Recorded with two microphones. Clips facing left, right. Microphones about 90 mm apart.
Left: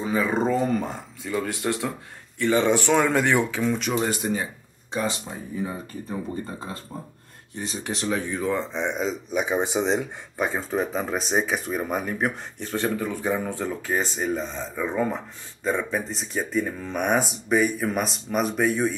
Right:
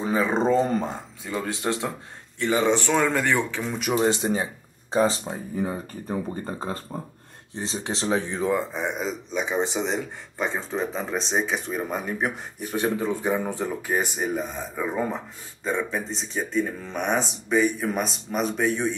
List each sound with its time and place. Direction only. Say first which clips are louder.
0.0 s speech: right 1 dB; 30° right (ahead or behind)
2.7 s speech: left 2 dB; 10° left (ahead or behind)
3.6 s speech: left 2 dB; 5° right (ahead or behind)
4.0 s speech: right 3 dB; 25° right (ahead or behind)
7.5 s speech: right 1 dB; 25° right (ahead or behind)
8.5 s speech: even; 10° right (ahead or behind)
9.3 s speech: left 1 dB; 10° left (ahead or behind); by 12.8 s 10° right (ahead or behind)
12.8 s speech: right 2 dB; 25° right (ahead or behind)
15.6 s speech: left 1 dB; centre (ahead or behind)